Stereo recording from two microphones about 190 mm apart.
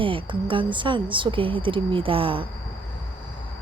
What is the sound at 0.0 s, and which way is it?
Speech, 25° right (ahead or behind).